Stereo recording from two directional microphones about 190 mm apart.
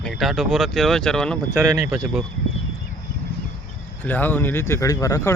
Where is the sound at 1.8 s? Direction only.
10° right (ahead or behind).